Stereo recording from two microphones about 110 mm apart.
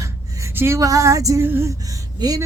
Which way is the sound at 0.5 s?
25° right (ahead or behind).